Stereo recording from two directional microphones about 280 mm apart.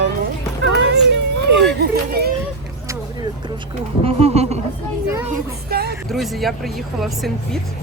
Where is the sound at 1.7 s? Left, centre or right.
Right.